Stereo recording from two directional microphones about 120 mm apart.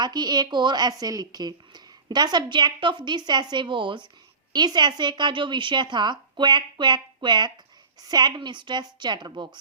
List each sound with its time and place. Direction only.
0.0 s a woman's voice: 35° right (ahead or behind)